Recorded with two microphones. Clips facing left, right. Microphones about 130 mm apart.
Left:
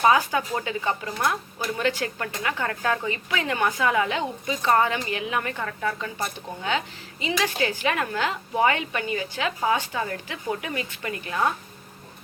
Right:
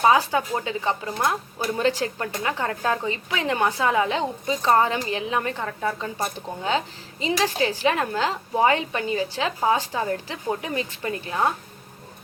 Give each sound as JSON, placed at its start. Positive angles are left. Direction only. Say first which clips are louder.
{"t": 0.0, "sound": "a woman's voice", "louder": "right 1 dB", "side_deg": -25}
{"t": 1.8, "sound": "speech", "louder": "right 3 dB", "side_deg": -35}
{"t": 2.1, "sound": "a woman's voice", "louder": "right 2 dB", "side_deg": -20}
{"t": 6.1, "sound": "a woman's voice", "louder": "right 3 dB", "side_deg": -35}